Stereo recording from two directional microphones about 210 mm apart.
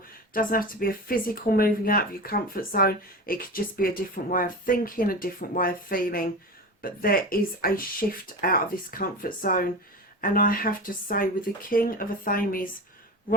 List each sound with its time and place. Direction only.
0.3 s speech: 40° left (ahead or behind)